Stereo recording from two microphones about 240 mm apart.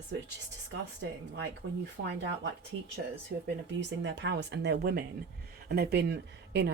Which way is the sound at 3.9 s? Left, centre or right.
Right.